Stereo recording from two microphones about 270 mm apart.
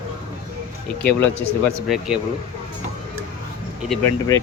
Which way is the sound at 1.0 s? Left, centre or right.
Centre.